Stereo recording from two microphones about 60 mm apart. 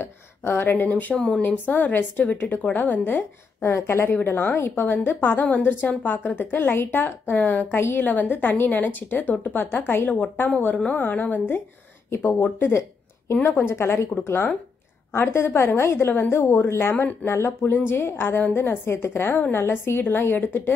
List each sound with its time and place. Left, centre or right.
0.0 s a sound: left
0.8 s speech: left
1.1 s speech: centre
1.4 s a woman's voice: left
3.7 s a woman's voice: left